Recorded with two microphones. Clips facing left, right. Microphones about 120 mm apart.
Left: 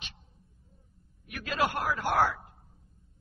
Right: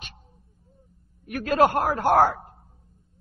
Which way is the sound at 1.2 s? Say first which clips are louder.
Right 10 dB; 45° right (ahead or behind).